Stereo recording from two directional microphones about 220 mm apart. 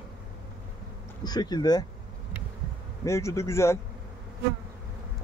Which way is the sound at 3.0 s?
15° left (ahead or behind).